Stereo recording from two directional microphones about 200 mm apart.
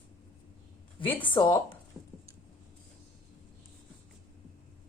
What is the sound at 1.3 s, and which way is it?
Speech, 25° left (ahead or behind).